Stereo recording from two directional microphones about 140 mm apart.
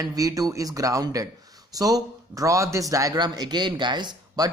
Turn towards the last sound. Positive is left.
turn(degrees=-30)  # may be behind; listen again after turning